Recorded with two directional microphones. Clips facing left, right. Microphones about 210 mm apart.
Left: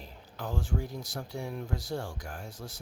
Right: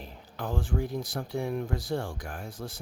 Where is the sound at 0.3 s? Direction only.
55° right (ahead or behind).